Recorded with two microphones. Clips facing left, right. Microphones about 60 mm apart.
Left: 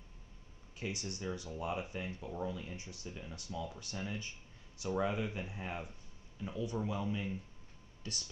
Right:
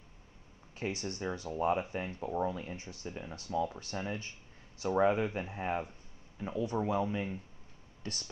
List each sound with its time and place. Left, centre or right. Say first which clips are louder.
0.7 s speech: right 5 dB; right